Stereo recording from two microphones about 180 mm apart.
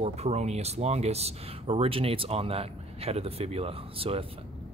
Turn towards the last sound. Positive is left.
turn(degrees=-30)  # may be behind; listen again after turning